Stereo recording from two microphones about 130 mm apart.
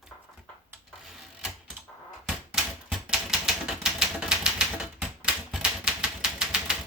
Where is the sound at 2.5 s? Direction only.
5° right (ahead or behind).